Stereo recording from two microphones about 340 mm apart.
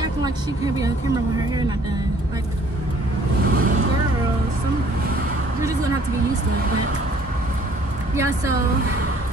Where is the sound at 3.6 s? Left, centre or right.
Right.